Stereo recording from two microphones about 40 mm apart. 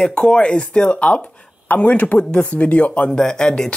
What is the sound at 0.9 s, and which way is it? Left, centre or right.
Speech, left.